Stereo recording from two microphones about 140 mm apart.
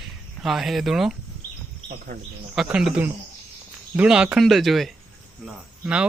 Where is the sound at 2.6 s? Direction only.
5° right (ahead or behind).